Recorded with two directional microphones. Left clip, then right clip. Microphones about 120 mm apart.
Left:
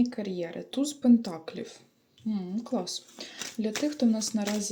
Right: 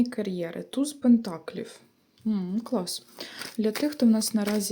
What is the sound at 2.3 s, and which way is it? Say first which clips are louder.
Speech: right 3 dB; 45° right (ahead or behind).